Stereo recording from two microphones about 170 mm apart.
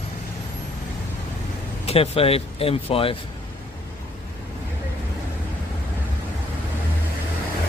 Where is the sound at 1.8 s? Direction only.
35° left (ahead or behind).